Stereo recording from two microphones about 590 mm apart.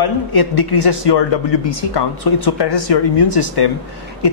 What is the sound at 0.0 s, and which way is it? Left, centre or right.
Speech, left.